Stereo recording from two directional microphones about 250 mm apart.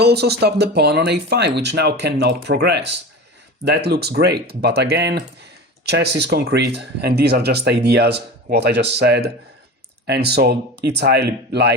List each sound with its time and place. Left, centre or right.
0.0 s speech: right